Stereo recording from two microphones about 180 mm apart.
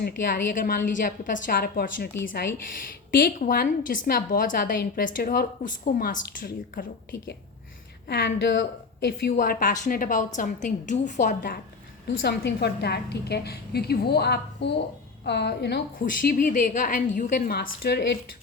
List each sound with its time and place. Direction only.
0.0 s a woman's voice: 50° left (ahead or behind)
8.0 s a woman's voice: 75° left (ahead or behind)
9.3 s a woman's voice: 50° left (ahead or behind)
12.0 s a woman's voice: 75° left (ahead or behind)
16.2 s a woman's voice: 50° left (ahead or behind); by 18.2 s 65° left (ahead or behind)